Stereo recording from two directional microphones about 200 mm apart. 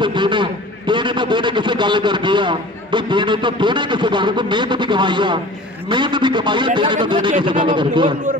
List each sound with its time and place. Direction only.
0.0 s a man's voice: 25° right (ahead or behind)